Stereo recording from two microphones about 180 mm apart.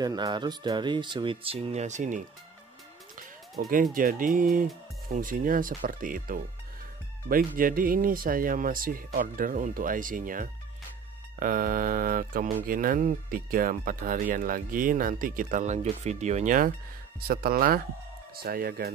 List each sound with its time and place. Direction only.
0.0 s speech: 20° right (ahead or behind); by 2.2 s 45° right (ahead or behind)
3.5 s speech: 55° right (ahead or behind)